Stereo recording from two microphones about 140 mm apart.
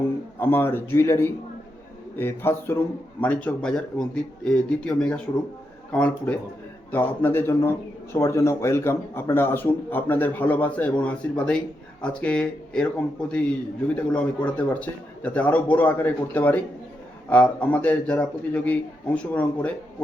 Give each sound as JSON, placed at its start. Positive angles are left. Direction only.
{"t": 0.3, "sound": "a man's voice", "side_deg": 15}